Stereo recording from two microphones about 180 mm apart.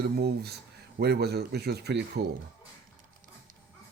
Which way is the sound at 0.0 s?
65° right (ahead or behind).